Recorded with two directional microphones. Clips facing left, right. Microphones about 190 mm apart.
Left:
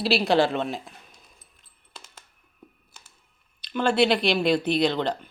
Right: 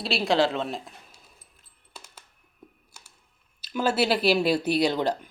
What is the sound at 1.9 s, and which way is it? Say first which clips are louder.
Computer keyboard: even; 10° right (ahead or behind).